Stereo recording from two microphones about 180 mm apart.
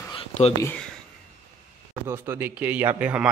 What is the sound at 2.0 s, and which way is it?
Speech, 10° right (ahead or behind).